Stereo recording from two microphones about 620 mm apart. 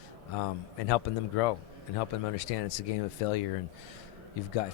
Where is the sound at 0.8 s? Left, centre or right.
Left.